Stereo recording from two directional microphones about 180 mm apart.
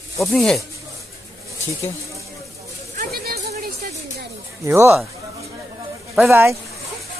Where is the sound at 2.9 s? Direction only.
60° right (ahead or behind).